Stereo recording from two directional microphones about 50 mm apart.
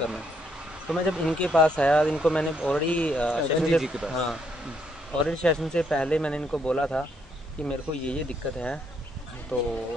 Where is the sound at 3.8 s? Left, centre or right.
Centre.